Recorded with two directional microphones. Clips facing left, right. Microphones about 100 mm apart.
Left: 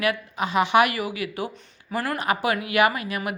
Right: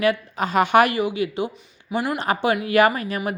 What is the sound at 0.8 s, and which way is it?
A woman's voice, 25° right (ahead or behind).